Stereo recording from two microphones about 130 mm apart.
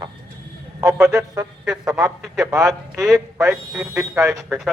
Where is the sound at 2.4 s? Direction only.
25° right (ahead or behind).